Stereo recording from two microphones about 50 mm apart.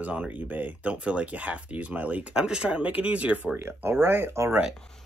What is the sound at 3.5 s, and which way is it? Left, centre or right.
Speech, right.